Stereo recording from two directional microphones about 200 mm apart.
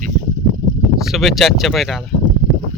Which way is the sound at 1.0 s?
Centre (ahead or behind).